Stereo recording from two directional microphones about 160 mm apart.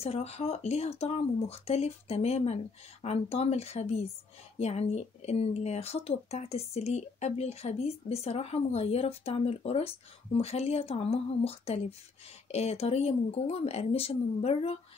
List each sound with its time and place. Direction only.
0.0 s speech: 40° left (ahead or behind)